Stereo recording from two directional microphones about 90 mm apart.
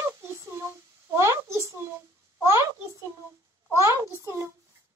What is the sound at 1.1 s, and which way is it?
Speech, 30° right (ahead or behind).